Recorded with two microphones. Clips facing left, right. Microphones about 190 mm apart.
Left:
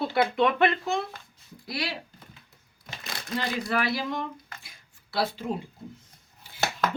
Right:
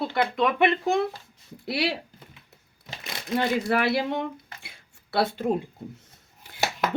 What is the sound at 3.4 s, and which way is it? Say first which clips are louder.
Speech: right 5 dB; 55° right (ahead or behind).